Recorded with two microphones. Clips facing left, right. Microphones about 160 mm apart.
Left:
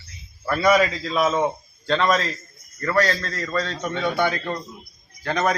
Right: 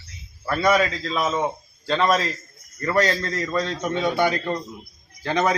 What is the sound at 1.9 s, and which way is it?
Speech, 10° right (ahead or behind).